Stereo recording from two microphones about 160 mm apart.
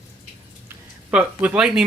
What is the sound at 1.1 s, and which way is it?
Speech, 10° right (ahead or behind).